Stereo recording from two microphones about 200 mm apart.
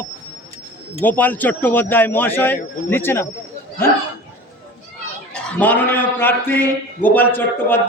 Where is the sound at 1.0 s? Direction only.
10° left (ahead or behind).